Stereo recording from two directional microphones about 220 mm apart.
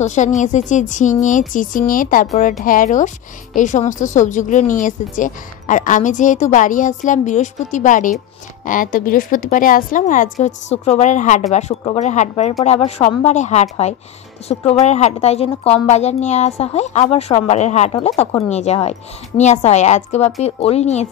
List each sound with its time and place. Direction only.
0.0 s speech: 35° left (ahead or behind)